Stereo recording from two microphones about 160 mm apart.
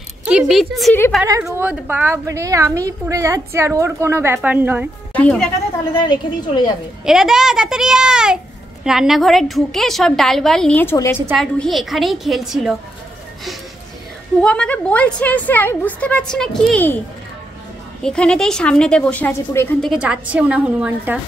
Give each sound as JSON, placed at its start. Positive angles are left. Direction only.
{"t": 0.3, "sound": "a woman's voice", "side_deg": -5}
{"t": 1.6, "sound": "a woman's voice", "side_deg": -10}
{"t": 5.1, "sound": "a woman's voice", "side_deg": 10}
{"t": 5.9, "sound": "a woman's voice", "side_deg": 25}
{"t": 7.1, "sound": "a woman's voice", "side_deg": -5}
{"t": 11.3, "sound": "a woman's voice", "side_deg": 0}
{"t": 14.4, "sound": "a woman's voice", "side_deg": 5}
{"t": 18.0, "sound": "a woman's voice", "side_deg": 5}
{"t": 19.8, "sound": "a woman's voice", "side_deg": -5}